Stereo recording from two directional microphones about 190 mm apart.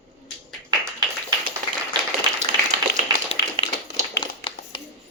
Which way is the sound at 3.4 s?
55° left (ahead or behind).